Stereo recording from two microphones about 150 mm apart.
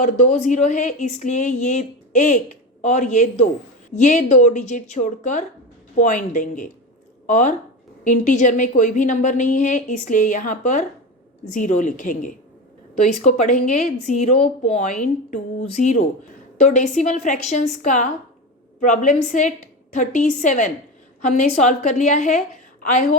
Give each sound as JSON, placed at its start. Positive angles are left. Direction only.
{"t": 0.0, "sound": "speech", "side_deg": 50}